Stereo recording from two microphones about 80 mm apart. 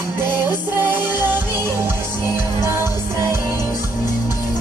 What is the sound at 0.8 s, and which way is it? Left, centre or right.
Music, right.